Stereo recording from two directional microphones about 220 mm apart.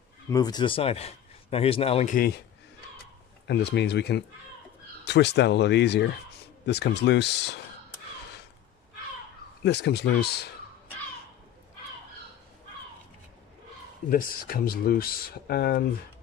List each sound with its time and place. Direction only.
0.3 s a man's voice: 20° left (ahead or behind); by 2.4 s 45° left (ahead or behind)
3.4 s speech: 50° left (ahead or behind)
9.6 s speech: 50° left (ahead or behind)
14.1 s speech: 40° left (ahead or behind)